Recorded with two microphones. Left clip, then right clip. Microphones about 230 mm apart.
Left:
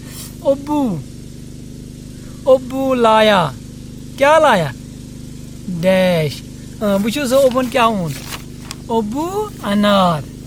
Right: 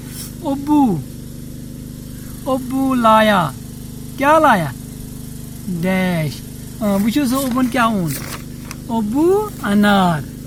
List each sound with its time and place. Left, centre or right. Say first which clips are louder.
0.4 s speech: even; left
2.5 s speech: left 6 dB; left
5.8 s speech: left 7 dB; left